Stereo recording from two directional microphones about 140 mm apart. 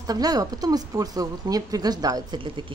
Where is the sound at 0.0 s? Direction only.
25° right (ahead or behind).